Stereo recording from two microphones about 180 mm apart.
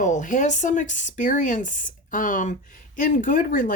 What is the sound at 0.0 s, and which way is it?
Speech, 45° left (ahead or behind).